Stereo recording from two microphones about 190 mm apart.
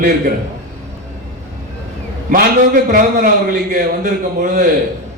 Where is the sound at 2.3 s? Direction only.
45° right (ahead or behind).